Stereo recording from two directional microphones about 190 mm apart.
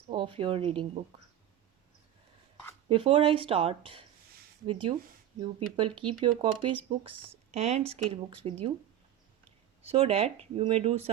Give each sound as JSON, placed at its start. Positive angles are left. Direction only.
{"t": 0.1, "sound": "speech", "side_deg": -25}
{"t": 2.9, "sound": "speech", "side_deg": -30}
{"t": 9.8, "sound": "speech", "side_deg": -30}